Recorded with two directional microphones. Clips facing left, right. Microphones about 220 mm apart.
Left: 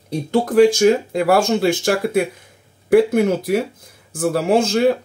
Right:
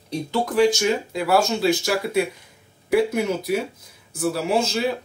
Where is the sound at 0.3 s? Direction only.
50° left (ahead or behind).